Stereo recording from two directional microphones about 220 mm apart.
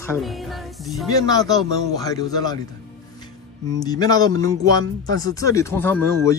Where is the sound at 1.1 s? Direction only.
15° left (ahead or behind).